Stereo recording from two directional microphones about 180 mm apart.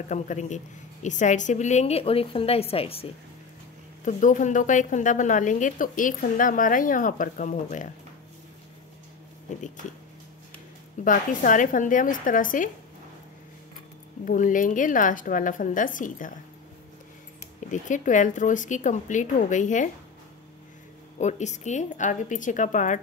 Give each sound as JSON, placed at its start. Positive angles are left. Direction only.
{"t": 0.1, "sound": "a woman's voice", "side_deg": 40}
{"t": 4.0, "sound": "a woman's voice", "side_deg": 45}
{"t": 11.1, "sound": "a woman's voice", "side_deg": 45}
{"t": 14.2, "sound": "a woman's voice", "side_deg": 45}
{"t": 17.6, "sound": "a woman's voice", "side_deg": 45}
{"t": 21.2, "sound": "a woman's voice", "side_deg": 40}